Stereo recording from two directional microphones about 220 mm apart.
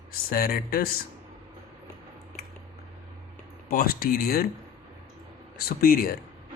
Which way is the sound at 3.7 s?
40° left (ahead or behind).